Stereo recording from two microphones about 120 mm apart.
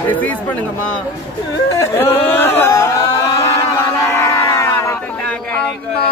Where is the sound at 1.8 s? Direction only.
20° left (ahead or behind).